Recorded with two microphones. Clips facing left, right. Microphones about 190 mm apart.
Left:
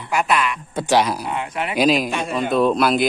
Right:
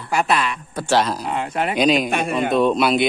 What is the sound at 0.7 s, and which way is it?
Speech, 15° left (ahead or behind).